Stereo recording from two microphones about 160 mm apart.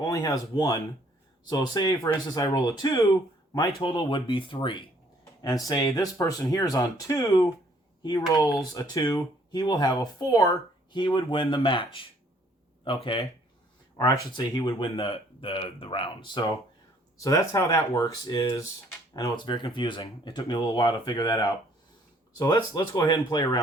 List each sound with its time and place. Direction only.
0.0 s speech: 25° left (ahead or behind)